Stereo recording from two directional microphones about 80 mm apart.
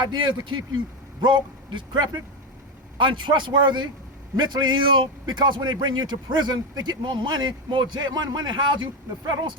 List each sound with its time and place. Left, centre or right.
0.0 s a man's voice: right
3.0 s a man's voice: right